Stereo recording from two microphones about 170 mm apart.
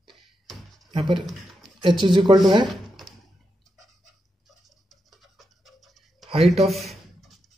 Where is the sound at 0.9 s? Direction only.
30° right (ahead or behind).